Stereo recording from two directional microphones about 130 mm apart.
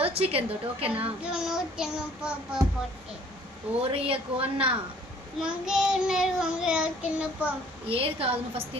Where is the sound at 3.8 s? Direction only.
45° right (ahead or behind).